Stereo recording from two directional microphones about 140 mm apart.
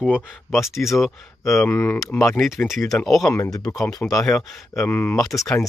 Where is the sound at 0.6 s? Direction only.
Centre (ahead or behind).